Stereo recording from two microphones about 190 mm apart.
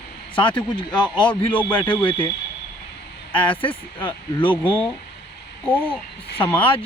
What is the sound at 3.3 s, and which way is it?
Speech, 25° left (ahead or behind).